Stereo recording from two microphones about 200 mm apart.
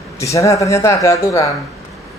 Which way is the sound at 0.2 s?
15° left (ahead or behind).